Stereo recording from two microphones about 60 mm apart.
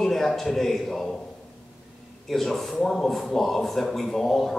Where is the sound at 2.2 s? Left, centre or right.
Centre.